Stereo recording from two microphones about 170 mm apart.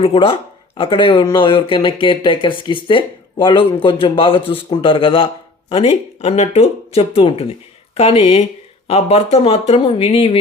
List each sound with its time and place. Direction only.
0.0 s speech: 30° left (ahead or behind)